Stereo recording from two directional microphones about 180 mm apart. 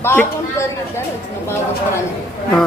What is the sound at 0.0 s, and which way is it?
Speech, 10° left (ahead or behind).